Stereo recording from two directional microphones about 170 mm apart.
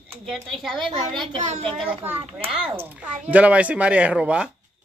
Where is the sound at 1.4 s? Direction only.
40° right (ahead or behind).